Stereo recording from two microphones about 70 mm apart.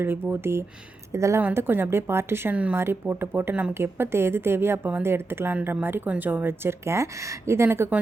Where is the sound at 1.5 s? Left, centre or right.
Right.